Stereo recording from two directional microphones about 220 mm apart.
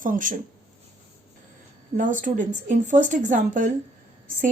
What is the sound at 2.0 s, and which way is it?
Speech, 35° right (ahead or behind).